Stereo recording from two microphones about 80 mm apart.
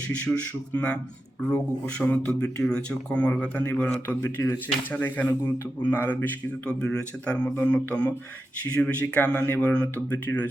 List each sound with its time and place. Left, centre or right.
0.3 s speech: centre
0.7 s speech: centre
2.0 s speech: left
4.4 s speech: left
4.9 s speech: left
7.5 s speech: left